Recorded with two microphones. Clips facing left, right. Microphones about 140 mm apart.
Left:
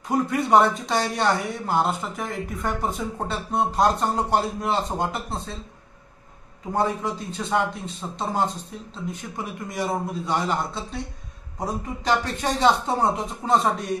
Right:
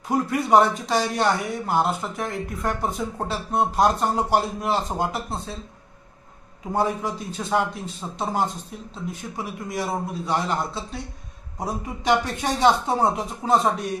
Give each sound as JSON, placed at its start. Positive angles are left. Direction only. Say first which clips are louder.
{"t": 0.1, "sound": "speech", "louder": "even", "side_deg": 0}
{"t": 6.7, "sound": "speech", "louder": "even", "side_deg": -5}